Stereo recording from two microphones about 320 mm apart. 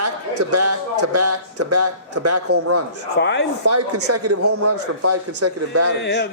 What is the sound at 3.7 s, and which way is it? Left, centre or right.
A man's voice, right.